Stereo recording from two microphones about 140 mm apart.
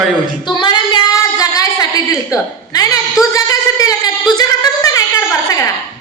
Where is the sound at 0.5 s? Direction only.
35° left (ahead or behind).